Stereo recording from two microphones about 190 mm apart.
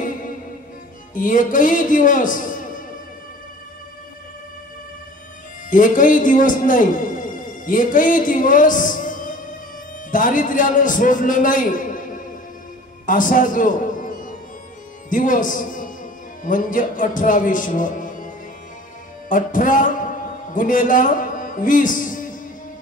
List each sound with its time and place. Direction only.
1.1 s a man's voice: 45° left (ahead or behind)
5.7 s a man's voice: 45° left (ahead or behind)
13.0 s music: 45° left (ahead or behind)
15.0 s a man's voice: 45° left (ahead or behind)